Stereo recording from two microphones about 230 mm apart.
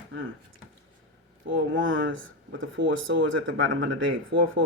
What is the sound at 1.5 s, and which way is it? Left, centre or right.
Speech, right.